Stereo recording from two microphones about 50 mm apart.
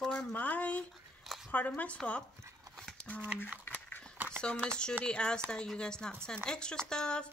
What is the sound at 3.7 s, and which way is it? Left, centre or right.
Dog, left.